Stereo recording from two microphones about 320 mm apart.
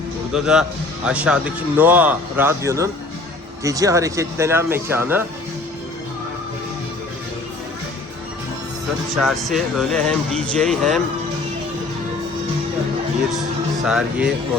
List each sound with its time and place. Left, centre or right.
0.3 s speech: centre
9.1 s speech: centre
13.8 s speech: centre